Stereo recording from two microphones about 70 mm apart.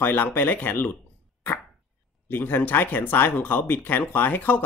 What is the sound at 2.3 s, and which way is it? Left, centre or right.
Speech, left.